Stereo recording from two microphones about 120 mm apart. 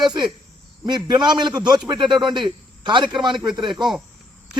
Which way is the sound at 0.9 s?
40° right (ahead or behind).